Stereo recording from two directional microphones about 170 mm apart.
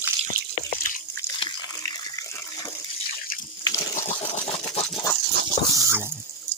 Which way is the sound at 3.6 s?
20° left (ahead or behind).